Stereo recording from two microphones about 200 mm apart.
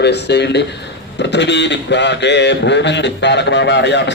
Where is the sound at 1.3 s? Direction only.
60° left (ahead or behind).